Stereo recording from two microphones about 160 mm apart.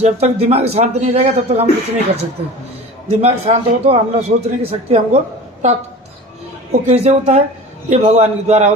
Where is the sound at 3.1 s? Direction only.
45° right (ahead or behind).